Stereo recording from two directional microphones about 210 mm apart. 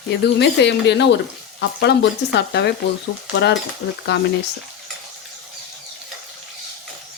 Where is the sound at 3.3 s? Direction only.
55° left (ahead or behind).